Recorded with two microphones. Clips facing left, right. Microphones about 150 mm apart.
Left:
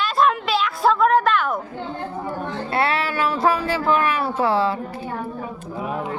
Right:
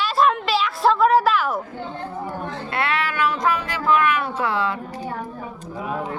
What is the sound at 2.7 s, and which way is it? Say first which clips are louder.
Speech: left 2 dB; 30° left (ahead or behind).